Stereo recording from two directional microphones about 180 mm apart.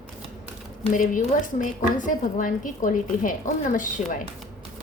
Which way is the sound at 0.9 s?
45° left (ahead or behind).